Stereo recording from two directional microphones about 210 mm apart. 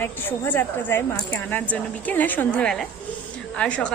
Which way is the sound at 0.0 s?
10° left (ahead or behind).